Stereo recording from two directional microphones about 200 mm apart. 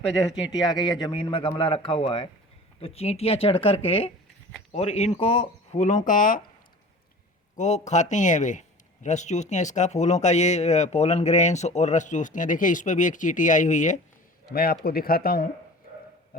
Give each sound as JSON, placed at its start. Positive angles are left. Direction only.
{"t": 0.5, "sound": "a man's voice", "side_deg": 20}
{"t": 7.5, "sound": "speech", "side_deg": 35}
{"t": 14.5, "sound": "speech", "side_deg": 50}